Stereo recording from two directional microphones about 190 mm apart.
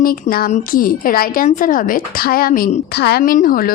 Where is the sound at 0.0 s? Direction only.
50° left (ahead or behind).